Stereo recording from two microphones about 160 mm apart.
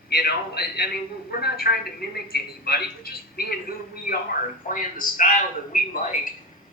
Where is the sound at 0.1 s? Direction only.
75° left (ahead or behind).